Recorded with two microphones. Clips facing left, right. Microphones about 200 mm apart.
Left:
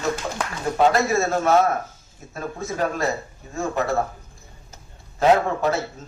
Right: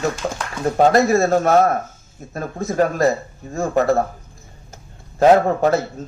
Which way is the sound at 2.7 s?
55° right (ahead or behind).